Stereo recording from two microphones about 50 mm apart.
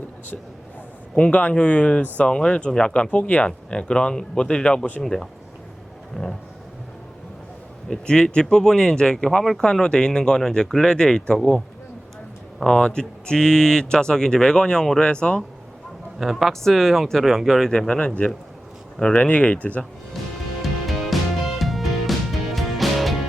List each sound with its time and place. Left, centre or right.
1.1 s speech: left; by 6.3 s centre
7.9 s speech: centre
12.6 s speech: centre
16.1 s speech: centre
16.5 s speech: centre
17.7 s speech: centre
19.1 s speech: left
20.6 s music: centre